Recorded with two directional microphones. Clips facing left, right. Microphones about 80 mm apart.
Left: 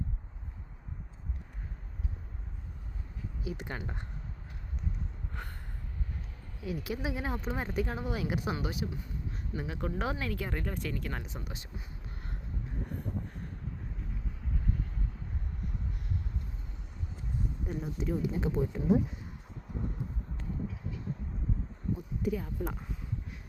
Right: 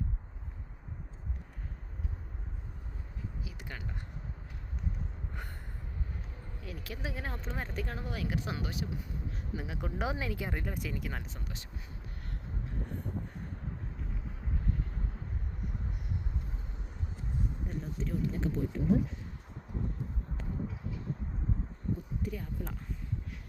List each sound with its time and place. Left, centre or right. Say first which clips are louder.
3.4 s speech: left 6 dB; left
6.6 s speech: left 7 dB; centre
8.5 s speech: left 2 dB; centre
11.4 s speech: left 1 dB; centre
12.8 s a sound: left 2 dB; centre
17.7 s speech: left 6 dB; centre
21.9 s a sound: left 9 dB; centre